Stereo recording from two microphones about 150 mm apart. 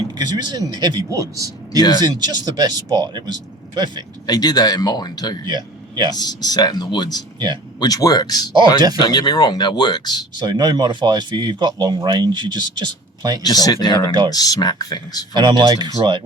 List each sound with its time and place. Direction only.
0.1 s speech: 30° right (ahead or behind)
4.3 s speech: 25° left (ahead or behind)
5.5 s speech: 30° right (ahead or behind)
6.1 s speech: 25° left (ahead or behind)
7.3 s speech: 30° right (ahead or behind)
7.8 s speech: 25° left (ahead or behind)
10.3 s speech: 30° right (ahead or behind)
13.4 s speech: 25° left (ahead or behind)
15.4 s speech: 30° right (ahead or behind)